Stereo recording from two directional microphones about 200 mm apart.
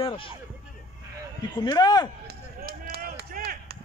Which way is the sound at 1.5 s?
20° left (ahead or behind).